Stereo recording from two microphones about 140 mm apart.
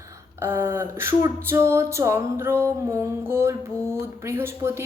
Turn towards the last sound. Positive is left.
turn(degrees=-15)  # may be behind; listen again after turning